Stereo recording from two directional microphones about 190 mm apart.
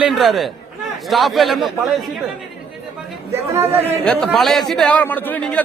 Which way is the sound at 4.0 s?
5° left (ahead or behind).